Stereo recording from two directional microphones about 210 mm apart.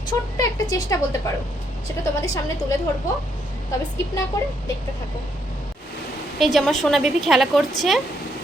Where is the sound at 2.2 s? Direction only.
15° left (ahead or behind).